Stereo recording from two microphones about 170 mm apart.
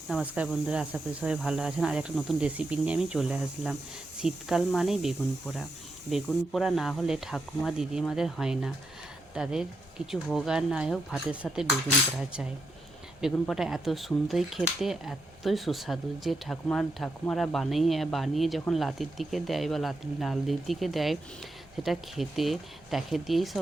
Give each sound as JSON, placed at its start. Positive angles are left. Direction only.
{"t": 0.1, "sound": "speech", "side_deg": -5}
{"t": 13.4, "sound": "speech", "side_deg": 0}